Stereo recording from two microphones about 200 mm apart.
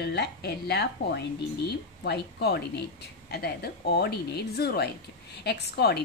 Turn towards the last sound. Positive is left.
turn(degrees=55)  # may be behind; listen again after turning